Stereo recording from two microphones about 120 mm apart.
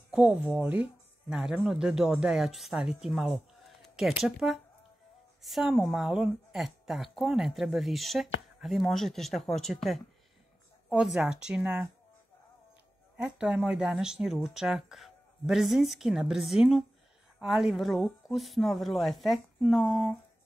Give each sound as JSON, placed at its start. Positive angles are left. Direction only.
{"t": 0.1, "sound": "a woman's voice", "side_deg": -10}
{"t": 13.1, "sound": "a woman's voice", "side_deg": -5}